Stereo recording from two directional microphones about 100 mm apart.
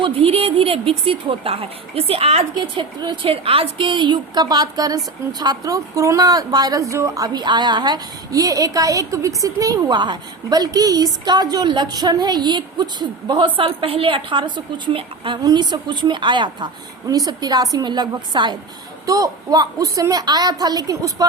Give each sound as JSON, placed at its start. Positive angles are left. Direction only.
{"t": 0.0, "sound": "a woman's voice", "side_deg": -65}
{"t": 2.7, "sound": "a woman's voice", "side_deg": -45}
{"t": 3.2, "sound": "a woman's voice", "side_deg": -70}
{"t": 7.3, "sound": "a woman's voice", "side_deg": -45}
{"t": 15.4, "sound": "a woman's voice", "side_deg": -45}